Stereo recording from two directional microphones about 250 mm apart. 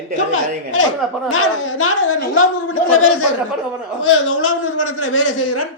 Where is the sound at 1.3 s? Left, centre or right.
Left.